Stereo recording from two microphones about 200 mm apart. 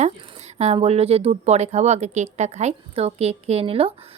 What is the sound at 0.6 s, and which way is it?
Speech, 30° right (ahead or behind).